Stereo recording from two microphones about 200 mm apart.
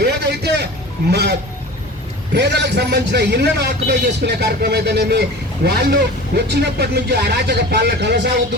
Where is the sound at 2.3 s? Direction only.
60° right (ahead or behind).